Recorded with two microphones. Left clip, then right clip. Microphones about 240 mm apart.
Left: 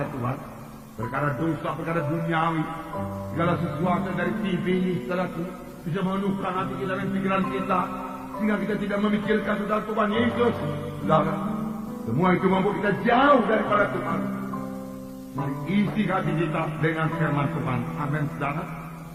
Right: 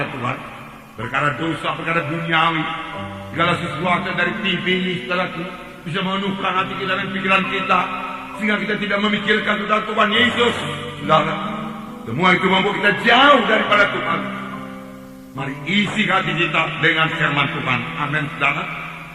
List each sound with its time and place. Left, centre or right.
0.0 s a sound: right
1.1 s a man's voice: right
15.7 s a man's voice: right